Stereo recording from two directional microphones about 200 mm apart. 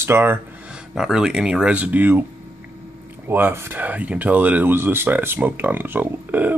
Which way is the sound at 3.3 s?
10° right (ahead or behind).